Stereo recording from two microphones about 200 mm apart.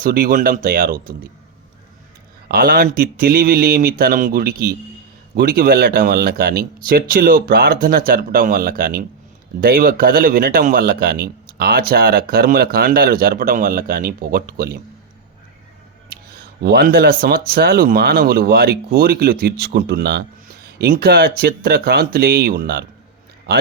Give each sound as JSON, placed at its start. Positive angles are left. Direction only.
{"t": 0.0, "sound": "a man's voice", "side_deg": -45}
{"t": 2.5, "sound": "a man's voice", "side_deg": -50}
{"t": 16.0, "sound": "a man's voice", "side_deg": -50}